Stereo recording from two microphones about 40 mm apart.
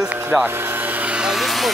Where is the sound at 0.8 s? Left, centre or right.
Right.